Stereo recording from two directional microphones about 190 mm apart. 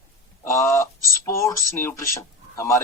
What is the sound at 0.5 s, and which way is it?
Speech, 15° left (ahead or behind).